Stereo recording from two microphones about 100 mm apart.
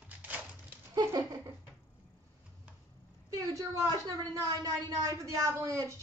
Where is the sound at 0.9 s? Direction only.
40° right (ahead or behind).